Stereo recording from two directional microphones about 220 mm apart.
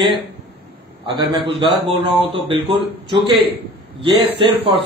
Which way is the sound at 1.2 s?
20° right (ahead or behind).